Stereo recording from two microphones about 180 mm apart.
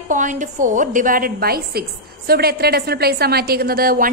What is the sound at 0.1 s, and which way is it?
A woman's voice, 45° right (ahead or behind).